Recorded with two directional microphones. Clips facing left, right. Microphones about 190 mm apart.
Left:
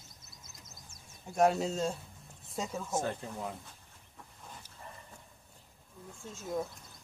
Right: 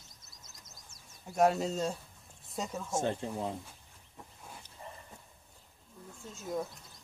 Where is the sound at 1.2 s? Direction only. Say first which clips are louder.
Even; centre (ahead or behind).